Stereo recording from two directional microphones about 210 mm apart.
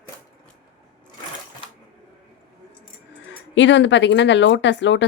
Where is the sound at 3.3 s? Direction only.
60° left (ahead or behind).